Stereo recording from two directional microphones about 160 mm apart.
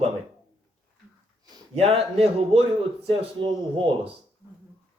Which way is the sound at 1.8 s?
40° right (ahead or behind).